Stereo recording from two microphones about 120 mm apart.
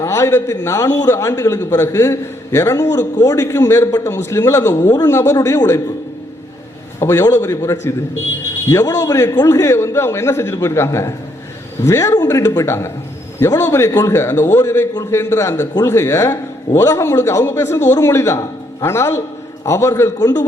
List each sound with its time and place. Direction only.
0.0 s a man's voice: 20° left (ahead or behind)
4.8 s a man's voice: 35° left (ahead or behind)
5.0 s a man's voice: 25° left (ahead or behind)
7.0 s a man's voice: 20° left (ahead or behind)